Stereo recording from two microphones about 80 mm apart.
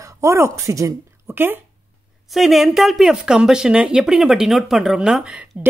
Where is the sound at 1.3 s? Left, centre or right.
Right.